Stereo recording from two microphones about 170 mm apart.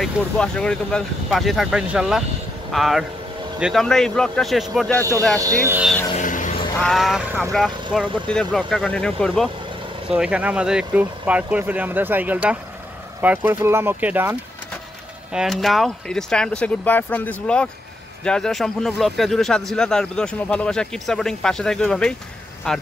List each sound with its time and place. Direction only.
0.0 s speech: 5° left (ahead or behind)
5.4 s speech: 20° right (ahead or behind)
6.1 s vehicle: 50° left (ahead or behind)
6.8 s speech: centre (ahead or behind)
15.3 s speech: centre (ahead or behind)